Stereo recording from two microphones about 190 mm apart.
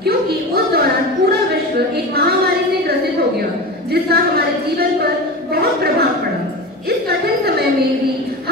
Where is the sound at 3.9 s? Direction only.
55° right (ahead or behind).